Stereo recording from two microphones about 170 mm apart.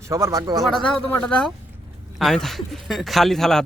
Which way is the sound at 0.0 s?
15° right (ahead or behind).